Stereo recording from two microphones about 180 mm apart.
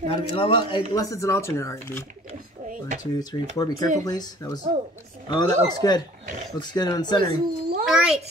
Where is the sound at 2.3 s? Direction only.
45° right (ahead or behind).